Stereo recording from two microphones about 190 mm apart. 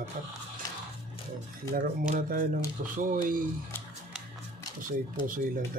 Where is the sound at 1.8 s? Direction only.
45° right (ahead or behind).